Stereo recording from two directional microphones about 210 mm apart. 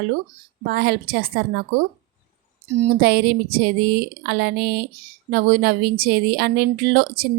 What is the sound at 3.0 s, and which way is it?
Speech, 45° right (ahead or behind).